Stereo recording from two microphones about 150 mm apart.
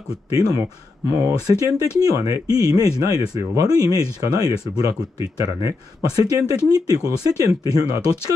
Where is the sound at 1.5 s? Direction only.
25° right (ahead or behind).